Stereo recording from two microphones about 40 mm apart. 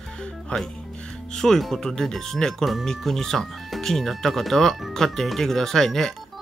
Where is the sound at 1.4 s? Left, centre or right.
Centre.